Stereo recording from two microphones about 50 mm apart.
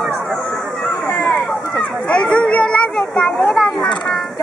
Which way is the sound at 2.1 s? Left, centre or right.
Centre.